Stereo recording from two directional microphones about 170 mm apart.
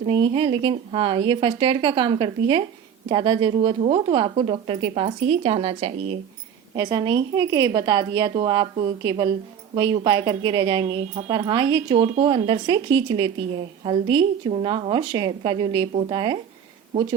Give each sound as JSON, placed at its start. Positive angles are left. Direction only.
{"t": 0.0, "sound": "a woman's voice", "side_deg": -30}
{"t": 6.7, "sound": "a woman's voice", "side_deg": -25}